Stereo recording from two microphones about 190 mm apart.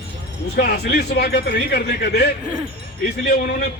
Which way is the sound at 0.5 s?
60° left (ahead or behind).